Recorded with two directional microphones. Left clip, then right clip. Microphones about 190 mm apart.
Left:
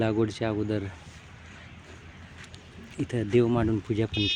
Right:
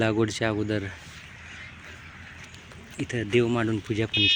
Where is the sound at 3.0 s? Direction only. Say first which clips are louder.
Even; 25° left (ahead or behind).